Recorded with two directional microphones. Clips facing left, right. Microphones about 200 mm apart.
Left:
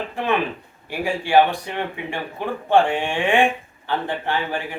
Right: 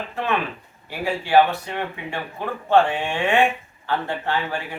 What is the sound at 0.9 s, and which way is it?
Speech, 15° left (ahead or behind).